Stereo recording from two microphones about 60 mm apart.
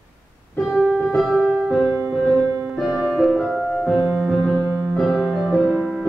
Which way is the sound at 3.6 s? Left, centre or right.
Centre.